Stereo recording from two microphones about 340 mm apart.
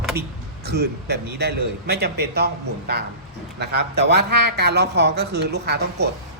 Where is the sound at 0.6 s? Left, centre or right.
Right.